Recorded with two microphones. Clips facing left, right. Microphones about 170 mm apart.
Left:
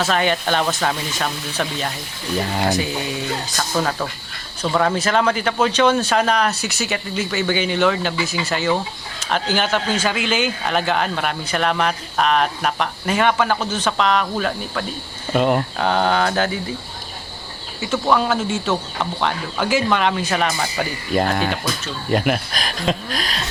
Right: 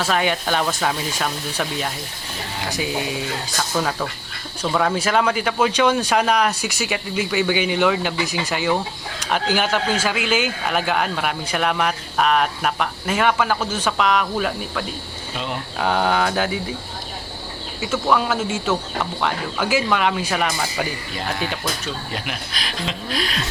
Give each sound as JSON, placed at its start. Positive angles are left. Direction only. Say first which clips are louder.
{"t": 0.0, "sound": "speech", "louder": "left 2 dB", "side_deg": -5}
{"t": 3.8, "sound": "speech", "louder": "left 2 dB", "side_deg": 5}
{"t": 4.9, "sound": "speech", "louder": "left 1 dB", "side_deg": -10}
{"t": 15.3, "sound": "speech", "louder": "left 11 dB", "side_deg": 55}
{"t": 15.8, "sound": "speech", "louder": "right 3 dB", "side_deg": -5}
{"t": 17.7, "sound": "speech", "louder": "left 1 dB", "side_deg": -5}
{"t": 21.1, "sound": "speech", "louder": "left 7 dB", "side_deg": 50}